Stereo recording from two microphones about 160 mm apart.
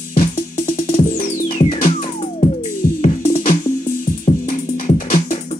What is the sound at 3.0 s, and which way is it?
Music, 50° left (ahead or behind).